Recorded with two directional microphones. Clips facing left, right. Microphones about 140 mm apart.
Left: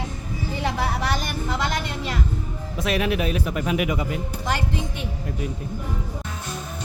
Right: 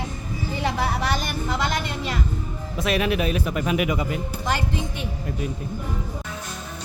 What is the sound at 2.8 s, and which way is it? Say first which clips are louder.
Speech: right 1 dB; 80° right.